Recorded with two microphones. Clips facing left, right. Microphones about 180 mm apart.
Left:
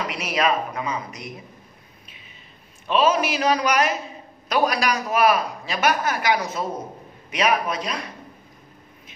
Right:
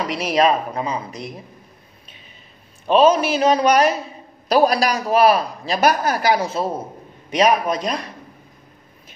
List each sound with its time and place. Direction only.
0.1 s a man's voice: 35° right (ahead or behind)
2.9 s a man's voice: 30° right (ahead or behind)